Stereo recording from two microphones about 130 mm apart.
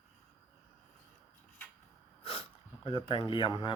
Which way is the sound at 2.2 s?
45° left (ahead or behind).